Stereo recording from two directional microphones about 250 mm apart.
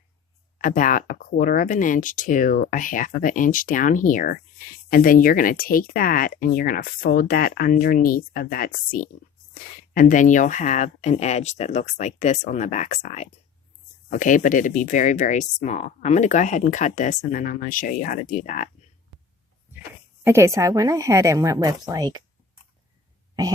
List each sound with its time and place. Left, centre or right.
0.6 s speech: left
20.2 s a woman's voice: centre
23.3 s a sound: centre